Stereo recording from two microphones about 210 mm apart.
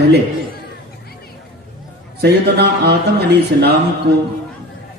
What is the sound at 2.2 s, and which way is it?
Mantra, 50° right (ahead or behind).